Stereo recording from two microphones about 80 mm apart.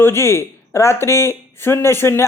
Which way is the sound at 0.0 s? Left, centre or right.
Left.